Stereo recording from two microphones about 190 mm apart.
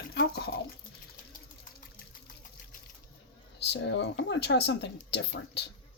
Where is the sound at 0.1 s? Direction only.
60° left (ahead or behind).